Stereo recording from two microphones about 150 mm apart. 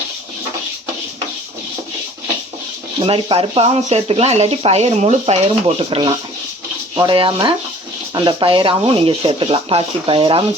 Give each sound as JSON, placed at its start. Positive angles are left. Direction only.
{"t": 3.0, "sound": "speech", "side_deg": -40}